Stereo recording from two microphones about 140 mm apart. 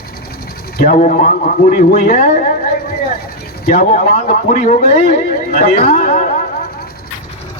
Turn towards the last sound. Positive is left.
turn(degrees=65)  # may be behind; listen again after turning